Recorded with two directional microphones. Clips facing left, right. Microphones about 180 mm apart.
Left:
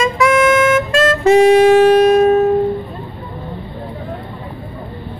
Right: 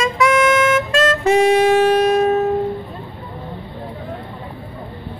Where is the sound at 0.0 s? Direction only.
50° left (ahead or behind).